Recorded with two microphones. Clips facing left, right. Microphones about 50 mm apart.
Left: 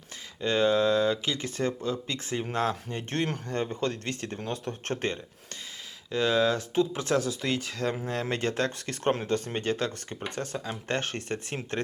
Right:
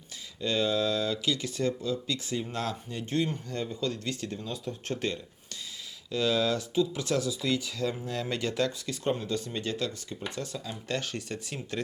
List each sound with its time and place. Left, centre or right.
0.4 s speech: left